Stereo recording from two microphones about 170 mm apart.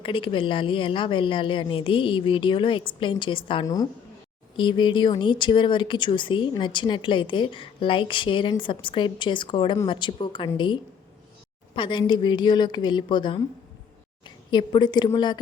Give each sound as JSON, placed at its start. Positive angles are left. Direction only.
{"t": 0.0, "sound": "speech", "side_deg": 30}
{"t": 11.7, "sound": "speech", "side_deg": 30}